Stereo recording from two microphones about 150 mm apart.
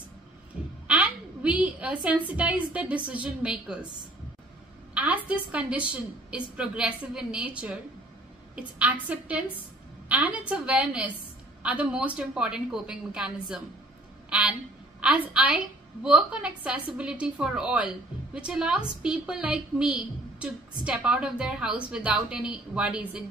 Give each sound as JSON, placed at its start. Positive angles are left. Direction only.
{"t": 0.8, "sound": "a woman's voice", "side_deg": -10}
{"t": 4.9, "sound": "a woman's voice", "side_deg": -10}
{"t": 10.0, "sound": "a woman's voice", "side_deg": -10}
{"t": 15.0, "sound": "a woman's voice", "side_deg": -10}